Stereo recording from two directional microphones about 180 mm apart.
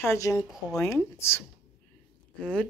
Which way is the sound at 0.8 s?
15° left (ahead or behind).